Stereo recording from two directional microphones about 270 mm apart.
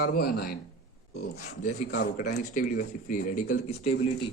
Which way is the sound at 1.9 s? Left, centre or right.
Left.